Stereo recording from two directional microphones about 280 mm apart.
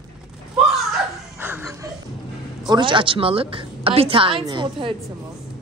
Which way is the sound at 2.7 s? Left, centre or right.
Centre.